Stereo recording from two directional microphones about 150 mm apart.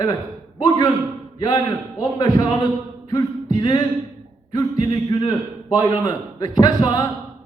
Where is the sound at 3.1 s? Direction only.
30° left (ahead or behind).